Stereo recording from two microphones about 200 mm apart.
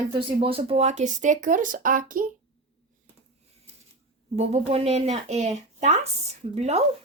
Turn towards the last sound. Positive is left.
turn(degrees=-30)  # may be behind; listen again after turning